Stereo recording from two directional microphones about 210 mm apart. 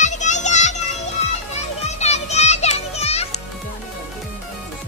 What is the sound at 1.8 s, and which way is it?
Music, 30° left (ahead or behind).